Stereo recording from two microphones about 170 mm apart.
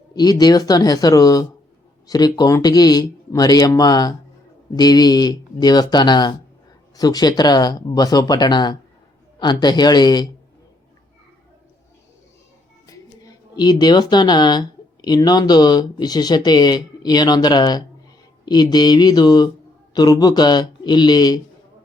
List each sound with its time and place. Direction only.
0.1 s speech: 25° left (ahead or behind)
13.6 s speech: 25° left (ahead or behind)